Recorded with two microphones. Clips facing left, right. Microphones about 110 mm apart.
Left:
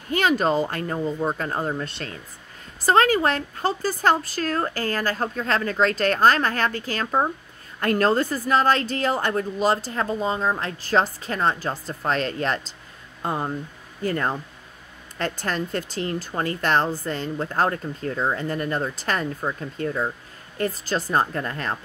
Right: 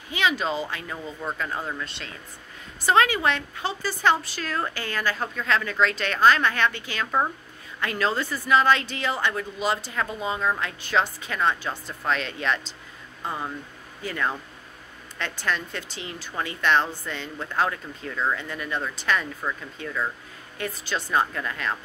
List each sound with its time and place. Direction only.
0.1 s speech: 45° left (ahead or behind)
13.2 s speech: 55° left (ahead or behind)